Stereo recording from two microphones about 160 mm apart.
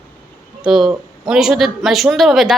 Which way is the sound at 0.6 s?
5° right (ahead or behind).